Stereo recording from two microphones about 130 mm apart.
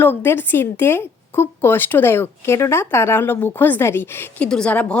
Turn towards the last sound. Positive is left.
turn(degrees=10)  # may be behind; listen again after turning